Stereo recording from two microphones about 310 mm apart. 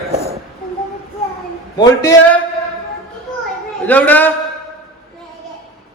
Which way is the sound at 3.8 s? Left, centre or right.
Centre.